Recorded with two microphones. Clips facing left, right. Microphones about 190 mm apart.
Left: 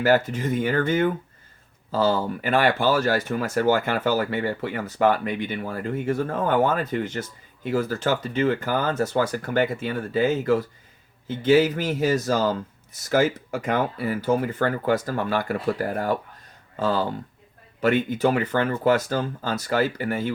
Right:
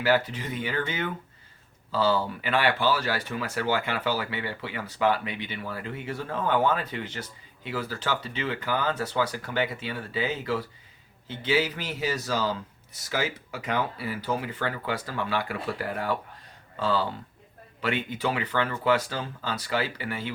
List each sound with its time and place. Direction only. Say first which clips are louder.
0.0 s speech: left 5 dB; 45° left (ahead or behind)